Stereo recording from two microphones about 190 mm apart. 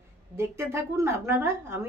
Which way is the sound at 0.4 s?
15° right (ahead or behind).